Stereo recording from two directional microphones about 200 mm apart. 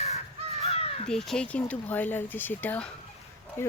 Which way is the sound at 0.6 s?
30° left (ahead or behind).